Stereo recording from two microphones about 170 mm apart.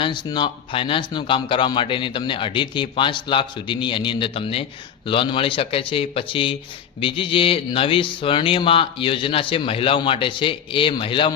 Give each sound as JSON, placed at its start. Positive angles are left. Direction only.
{"t": 0.0, "sound": "speech", "side_deg": 25}